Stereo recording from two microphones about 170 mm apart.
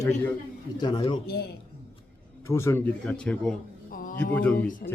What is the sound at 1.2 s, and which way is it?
Speech, 70° left (ahead or behind).